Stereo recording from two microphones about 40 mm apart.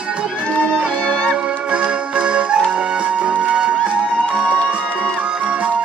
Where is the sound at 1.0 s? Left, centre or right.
Centre.